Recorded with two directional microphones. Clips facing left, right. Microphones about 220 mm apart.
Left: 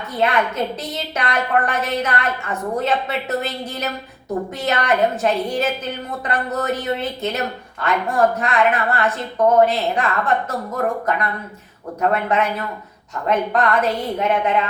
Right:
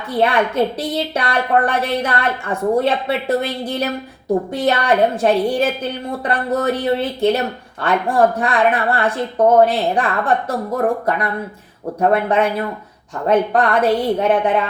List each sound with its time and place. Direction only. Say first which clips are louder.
0.2 s a woman's voice: right 4 dB; 30° right (ahead or behind)